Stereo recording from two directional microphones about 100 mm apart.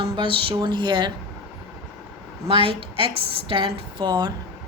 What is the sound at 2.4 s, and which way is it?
Speech, 60° right (ahead or behind).